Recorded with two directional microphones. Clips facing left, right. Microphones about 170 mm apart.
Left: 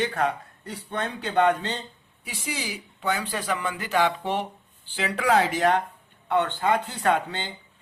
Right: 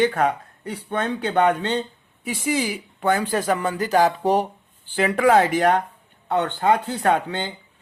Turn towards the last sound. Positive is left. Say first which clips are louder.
# right 3 dB
turn(degrees=-50)  # may be behind; listen again after turning